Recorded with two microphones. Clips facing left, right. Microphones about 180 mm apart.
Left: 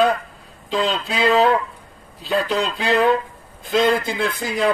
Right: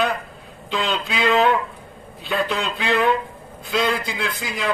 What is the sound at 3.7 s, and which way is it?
Speech, 50° left (ahead or behind).